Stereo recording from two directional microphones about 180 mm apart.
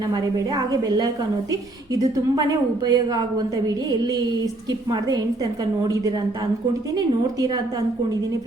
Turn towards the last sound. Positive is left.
turn(degrees=-20)  # may be behind; listen again after turning